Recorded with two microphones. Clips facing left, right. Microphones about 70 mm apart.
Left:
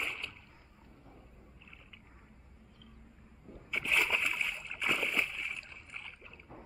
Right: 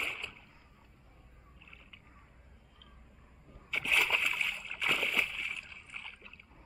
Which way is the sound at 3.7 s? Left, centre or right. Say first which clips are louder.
Right 1 dB; centre.